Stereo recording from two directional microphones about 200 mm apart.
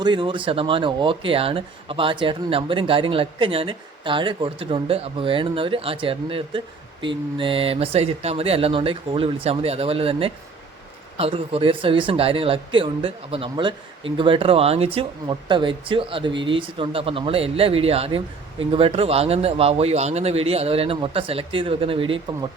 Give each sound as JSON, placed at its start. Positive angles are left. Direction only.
{"t": 0.0, "sound": "speech", "side_deg": -25}